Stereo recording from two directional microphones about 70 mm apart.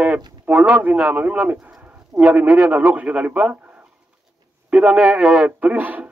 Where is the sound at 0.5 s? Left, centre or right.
Centre.